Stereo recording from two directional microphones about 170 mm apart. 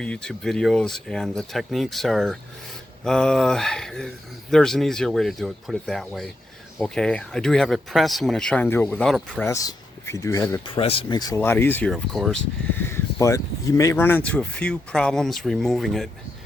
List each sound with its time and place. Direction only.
0.0 s speech: 5° left (ahead or behind)
10.8 s speech: 35° left (ahead or behind); by 12.4 s centre (ahead or behind)
12.7 s speech: 15° left (ahead or behind)